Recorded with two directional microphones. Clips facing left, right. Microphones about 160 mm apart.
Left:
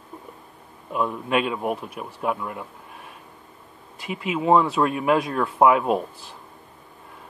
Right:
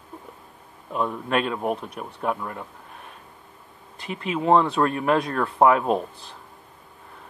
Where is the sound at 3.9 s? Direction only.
5° left (ahead or behind).